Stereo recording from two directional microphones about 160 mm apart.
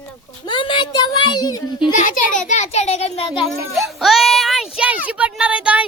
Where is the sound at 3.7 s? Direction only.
Centre (ahead or behind).